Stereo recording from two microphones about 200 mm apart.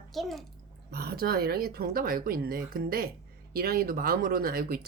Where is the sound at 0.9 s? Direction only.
50° right (ahead or behind).